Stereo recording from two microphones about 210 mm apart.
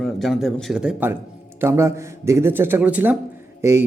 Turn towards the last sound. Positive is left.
turn(degrees=-15)  # may be behind; listen again after turning